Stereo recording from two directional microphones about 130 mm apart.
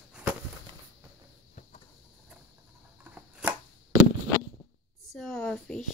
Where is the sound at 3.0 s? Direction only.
15° right (ahead or behind).